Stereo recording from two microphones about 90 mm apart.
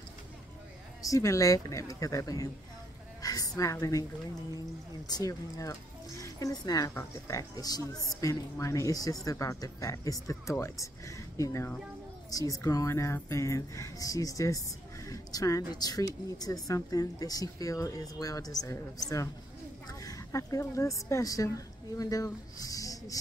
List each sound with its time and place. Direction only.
1.0 s speech: 35° left (ahead or behind)
3.2 s a sound: 45° left (ahead or behind)
5.0 s a woman's voice: 45° left (ahead or behind)
6.9 s speech: 35° left (ahead or behind)
19.9 s a woman's voice: 40° left (ahead or behind)